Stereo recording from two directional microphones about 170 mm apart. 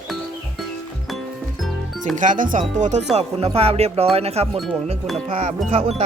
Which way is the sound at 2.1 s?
50° right (ahead or behind).